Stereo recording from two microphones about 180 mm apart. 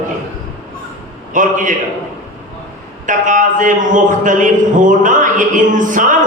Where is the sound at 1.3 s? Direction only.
45° right (ahead or behind).